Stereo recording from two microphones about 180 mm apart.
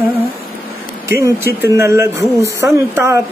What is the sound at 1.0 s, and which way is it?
Speech, 15° right (ahead or behind).